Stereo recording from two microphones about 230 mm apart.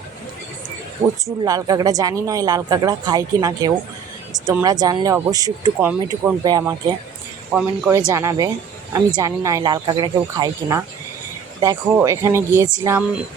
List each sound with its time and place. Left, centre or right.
1.0 s speech: centre
4.3 s a sound: centre
4.6 s speech: centre